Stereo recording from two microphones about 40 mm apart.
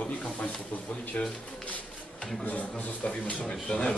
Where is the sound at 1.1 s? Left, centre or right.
Left.